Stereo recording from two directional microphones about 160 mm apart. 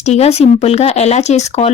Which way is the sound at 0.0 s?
40° left (ahead or behind).